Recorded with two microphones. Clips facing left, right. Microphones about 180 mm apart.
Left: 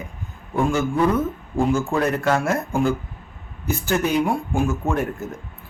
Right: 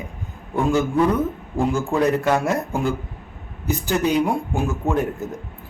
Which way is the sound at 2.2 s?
15° right (ahead or behind).